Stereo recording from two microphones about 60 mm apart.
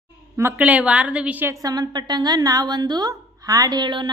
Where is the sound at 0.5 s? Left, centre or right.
Right.